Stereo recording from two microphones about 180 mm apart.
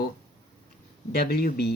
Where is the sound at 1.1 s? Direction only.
60° left (ahead or behind).